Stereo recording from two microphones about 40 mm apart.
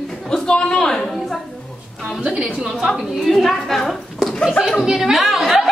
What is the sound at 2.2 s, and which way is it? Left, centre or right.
Speech, right.